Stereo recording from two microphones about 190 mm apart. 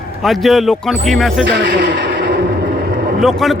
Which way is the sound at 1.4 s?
60° right (ahead or behind).